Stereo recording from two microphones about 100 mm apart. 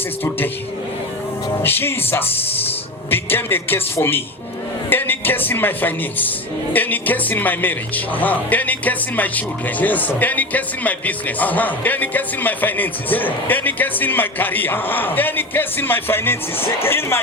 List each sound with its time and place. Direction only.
1.6 s speech: 20° left (ahead or behind)